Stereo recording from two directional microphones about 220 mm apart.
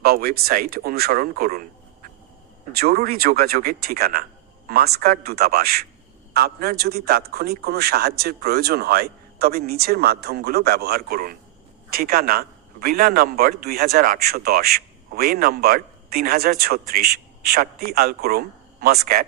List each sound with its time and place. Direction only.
0.0 s a man's voice: 45° right (ahead or behind)